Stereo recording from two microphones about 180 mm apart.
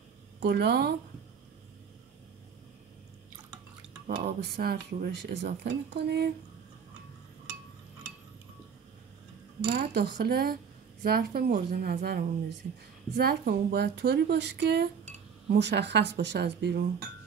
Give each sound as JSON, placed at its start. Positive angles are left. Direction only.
{"t": 0.4, "sound": "speech", "side_deg": -65}
{"t": 4.1, "sound": "speech", "side_deg": -60}
{"t": 9.8, "sound": "speech", "side_deg": -60}